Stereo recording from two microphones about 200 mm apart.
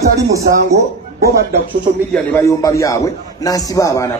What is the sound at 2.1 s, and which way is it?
A man's voice, 15° left (ahead or behind).